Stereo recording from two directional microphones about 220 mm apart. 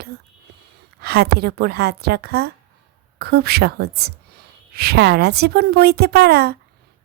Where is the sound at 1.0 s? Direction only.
45° right (ahead or behind).